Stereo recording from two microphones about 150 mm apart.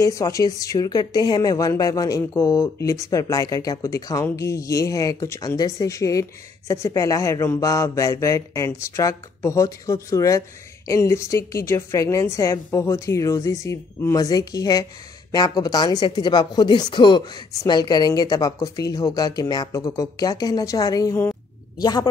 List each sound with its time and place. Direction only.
0.0 s speech: 20° left (ahead or behind)